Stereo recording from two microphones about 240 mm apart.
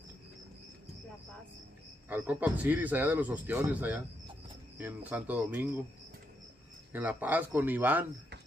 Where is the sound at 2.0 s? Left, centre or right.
Centre.